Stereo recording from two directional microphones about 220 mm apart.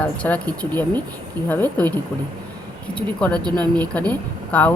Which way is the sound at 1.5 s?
5° left (ahead or behind).